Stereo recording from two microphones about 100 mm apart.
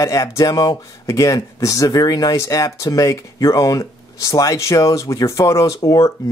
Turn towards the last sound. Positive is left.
turn(degrees=35)  # may be behind; listen again after turning